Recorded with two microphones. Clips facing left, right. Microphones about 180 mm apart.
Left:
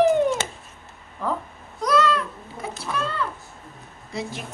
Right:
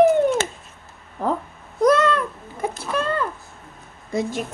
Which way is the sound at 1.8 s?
50° right (ahead or behind).